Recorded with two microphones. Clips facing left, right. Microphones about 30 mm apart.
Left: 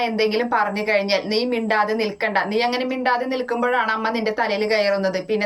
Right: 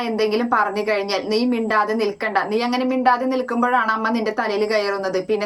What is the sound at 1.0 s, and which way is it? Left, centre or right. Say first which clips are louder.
A woman's voice: right 1 dB; left.